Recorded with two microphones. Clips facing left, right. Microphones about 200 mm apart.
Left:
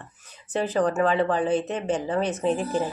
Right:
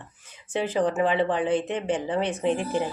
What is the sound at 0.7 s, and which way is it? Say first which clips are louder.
Speech: left 1 dB; 15° right (ahead or behind).